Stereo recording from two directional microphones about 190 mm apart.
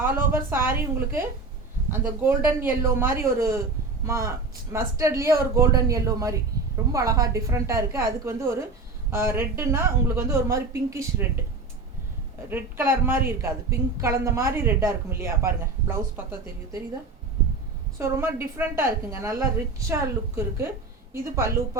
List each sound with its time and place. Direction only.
0.0 s a woman's voice: 10° right (ahead or behind)
12.5 s a woman's voice: 10° right (ahead or behind)
17.9 s a woman's voice: 15° right (ahead or behind)